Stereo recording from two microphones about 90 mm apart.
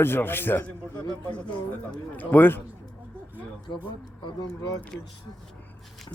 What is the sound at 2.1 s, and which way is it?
Speech, 20° left (ahead or behind).